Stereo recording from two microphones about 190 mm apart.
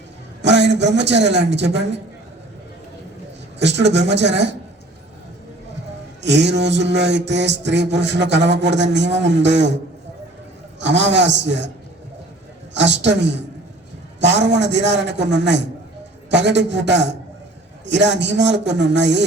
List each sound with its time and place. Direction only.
0.4 s a man's voice: 65° right (ahead or behind)
3.6 s mantra: 65° right (ahead or behind)
6.2 s mantra: 65° right (ahead or behind)
10.8 s a man's voice: 65° right (ahead or behind)
12.7 s a man's voice: 65° right (ahead or behind)
14.2 s mantra: 65° right (ahead or behind)
16.3 s a man's voice: 65° right (ahead or behind)